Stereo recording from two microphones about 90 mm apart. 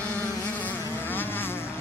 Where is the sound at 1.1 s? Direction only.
20° left (ahead or behind).